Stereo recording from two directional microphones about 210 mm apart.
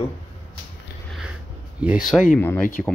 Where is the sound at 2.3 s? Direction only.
10° left (ahead or behind).